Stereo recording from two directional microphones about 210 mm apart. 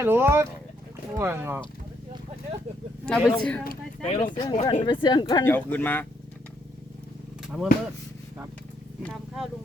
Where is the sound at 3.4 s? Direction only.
5° left (ahead or behind).